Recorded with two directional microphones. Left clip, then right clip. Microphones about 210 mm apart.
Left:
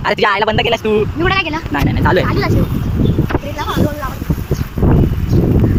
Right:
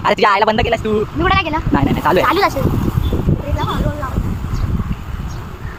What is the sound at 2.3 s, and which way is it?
Speech, 20° right (ahead or behind).